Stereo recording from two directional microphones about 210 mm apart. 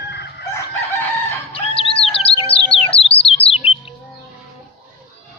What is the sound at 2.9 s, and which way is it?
Bird, 25° left (ahead or behind).